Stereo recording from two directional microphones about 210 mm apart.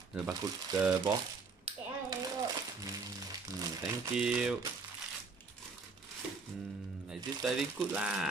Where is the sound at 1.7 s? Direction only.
30° right (ahead or behind).